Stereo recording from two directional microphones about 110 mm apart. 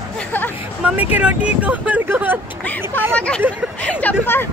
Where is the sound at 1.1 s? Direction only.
10° right (ahead or behind).